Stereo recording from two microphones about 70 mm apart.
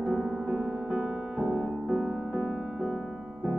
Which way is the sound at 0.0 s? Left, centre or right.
Centre.